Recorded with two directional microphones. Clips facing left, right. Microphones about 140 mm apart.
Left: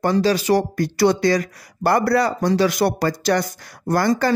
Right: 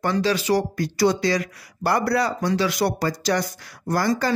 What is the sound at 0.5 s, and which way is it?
Speech, 55° left (ahead or behind).